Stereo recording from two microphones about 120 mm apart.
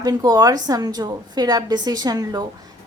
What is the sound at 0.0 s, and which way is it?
A woman's voice, 30° right (ahead or behind).